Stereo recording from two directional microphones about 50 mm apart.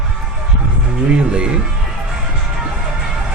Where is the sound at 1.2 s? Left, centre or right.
Centre.